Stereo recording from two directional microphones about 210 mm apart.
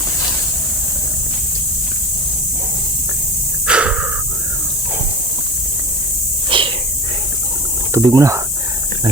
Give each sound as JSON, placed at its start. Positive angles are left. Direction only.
{"t": 3.7, "sound": "breathing", "side_deg": -5}
{"t": 6.5, "sound": "a sound", "side_deg": -25}
{"t": 7.9, "sound": "speech", "side_deg": -15}